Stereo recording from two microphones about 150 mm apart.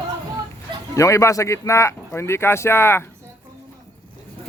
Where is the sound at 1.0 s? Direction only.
20° left (ahead or behind).